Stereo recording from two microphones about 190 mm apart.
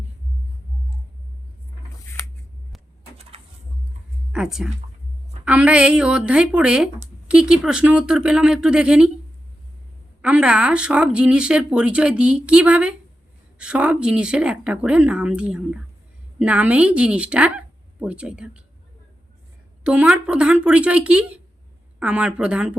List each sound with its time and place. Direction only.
3.3 s pigeon: 30° right (ahead or behind)
4.3 s speech: 5° right (ahead or behind)
10.2 s a woman's voice: 5° right (ahead or behind)
19.8 s speech: 5° right (ahead or behind)